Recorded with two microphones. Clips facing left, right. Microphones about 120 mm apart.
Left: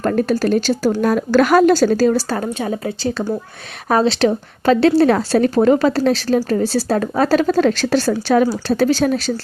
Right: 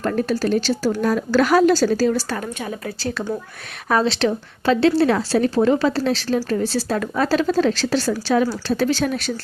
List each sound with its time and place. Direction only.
0.0 s a woman's voice: 45° left (ahead or behind)
2.1 s a woman's voice: 30° left (ahead or behind)
3.8 s a woman's voice: 35° left (ahead or behind); by 8.1 s 55° left (ahead or behind)
8.6 s a woman's voice: 40° left (ahead or behind)